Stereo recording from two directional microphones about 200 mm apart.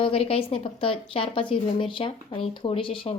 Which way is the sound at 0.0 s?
30° left (ahead or behind).